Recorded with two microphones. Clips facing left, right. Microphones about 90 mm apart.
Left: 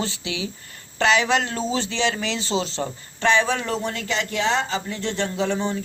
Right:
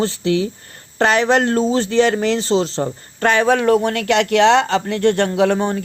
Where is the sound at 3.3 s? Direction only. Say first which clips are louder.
Right 10 dB; 55° right (ahead or behind).